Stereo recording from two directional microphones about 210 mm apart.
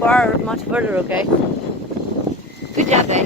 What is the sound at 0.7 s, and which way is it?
Speech, 5° right (ahead or behind).